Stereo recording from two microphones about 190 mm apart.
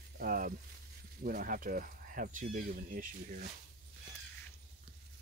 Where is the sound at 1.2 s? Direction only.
45° right (ahead or behind).